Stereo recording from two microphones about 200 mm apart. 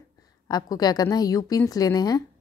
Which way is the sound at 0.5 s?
20° left (ahead or behind).